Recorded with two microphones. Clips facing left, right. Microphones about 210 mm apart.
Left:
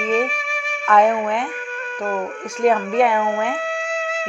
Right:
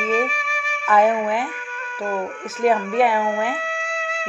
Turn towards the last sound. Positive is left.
turn(degrees=35)  # may be behind; listen again after turning